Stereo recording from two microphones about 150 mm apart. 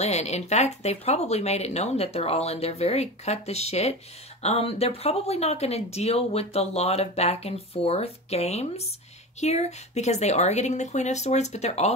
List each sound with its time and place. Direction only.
0.0 s speech: 50° left (ahead or behind)